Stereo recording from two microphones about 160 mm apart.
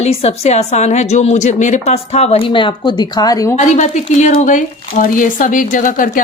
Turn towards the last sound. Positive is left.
turn(degrees=55)  # may be behind; listen again after turning